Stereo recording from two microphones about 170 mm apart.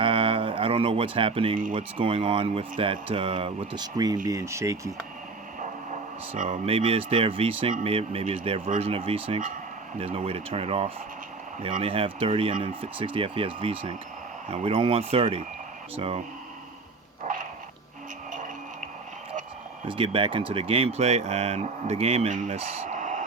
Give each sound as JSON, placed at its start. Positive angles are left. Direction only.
{"t": 0.0, "sound": "music", "side_deg": -30}
{"t": 1.7, "sound": "speech", "side_deg": -35}
{"t": 6.3, "sound": "speech", "side_deg": -50}
{"t": 6.7, "sound": "speech", "side_deg": -35}
{"t": 17.3, "sound": "dog", "side_deg": -45}
{"t": 19.9, "sound": "speech", "side_deg": -30}